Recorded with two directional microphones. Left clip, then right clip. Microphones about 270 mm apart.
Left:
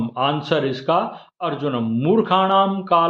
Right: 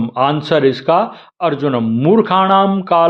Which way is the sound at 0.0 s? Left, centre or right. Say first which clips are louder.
Right 6 dB; right.